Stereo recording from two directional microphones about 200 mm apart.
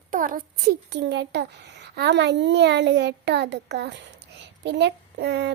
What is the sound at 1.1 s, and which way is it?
A child's voice, 60° right (ahead or behind).